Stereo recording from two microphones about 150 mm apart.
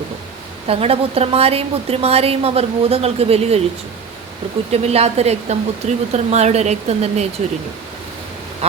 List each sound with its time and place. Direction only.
0.7 s a woman's voice: 40° right (ahead or behind)
4.7 s speech: 45° right (ahead or behind)